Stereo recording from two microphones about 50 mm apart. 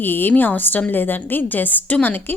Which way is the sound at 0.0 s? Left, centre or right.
Left.